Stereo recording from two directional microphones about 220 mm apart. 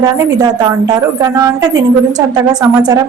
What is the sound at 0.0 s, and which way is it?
A woman's voice, 15° right (ahead or behind).